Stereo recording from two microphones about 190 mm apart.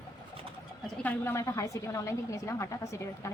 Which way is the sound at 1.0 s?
15° left (ahead or behind).